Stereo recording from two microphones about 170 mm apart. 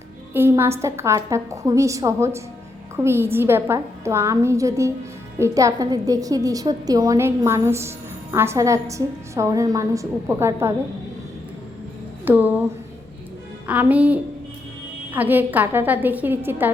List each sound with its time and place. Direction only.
0.3 s a woman's voice: 15° right (ahead or behind)
12.2 s speech: 10° right (ahead or behind)
13.7 s a woman's voice: 10° right (ahead or behind)